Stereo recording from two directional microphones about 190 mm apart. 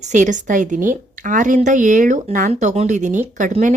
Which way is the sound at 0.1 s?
40° right (ahead or behind).